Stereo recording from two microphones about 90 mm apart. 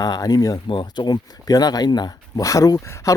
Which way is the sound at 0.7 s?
65° left (ahead or behind).